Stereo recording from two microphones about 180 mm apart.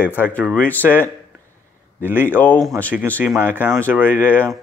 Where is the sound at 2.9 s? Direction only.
10° right (ahead or behind).